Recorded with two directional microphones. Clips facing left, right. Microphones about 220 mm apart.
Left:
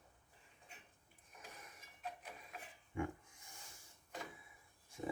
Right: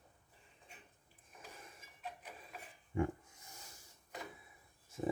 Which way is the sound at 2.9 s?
40° right (ahead or behind).